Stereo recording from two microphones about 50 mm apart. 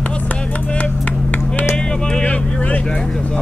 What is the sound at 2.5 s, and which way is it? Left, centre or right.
Vehicle, left.